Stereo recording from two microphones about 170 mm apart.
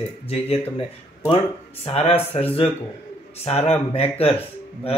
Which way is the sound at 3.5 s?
35° left (ahead or behind).